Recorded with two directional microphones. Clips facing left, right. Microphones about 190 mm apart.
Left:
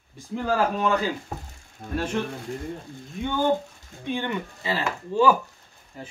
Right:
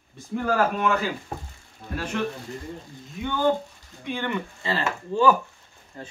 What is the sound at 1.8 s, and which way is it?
Speech, 50° left (ahead or behind).